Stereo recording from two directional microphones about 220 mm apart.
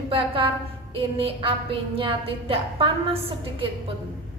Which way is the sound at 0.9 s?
25° right (ahead or behind).